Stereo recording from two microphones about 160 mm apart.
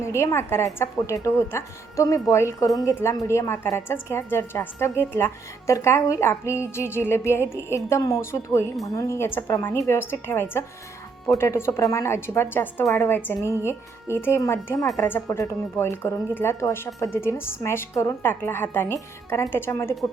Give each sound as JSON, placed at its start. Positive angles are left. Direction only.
{"t": 0.0, "sound": "a woman's voice", "side_deg": 20}